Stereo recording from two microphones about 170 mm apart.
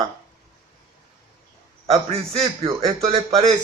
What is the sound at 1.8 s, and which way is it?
A man's voice, 35° right (ahead or behind).